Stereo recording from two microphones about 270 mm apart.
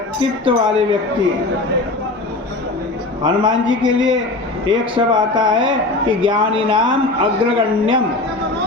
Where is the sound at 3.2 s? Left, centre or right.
Centre.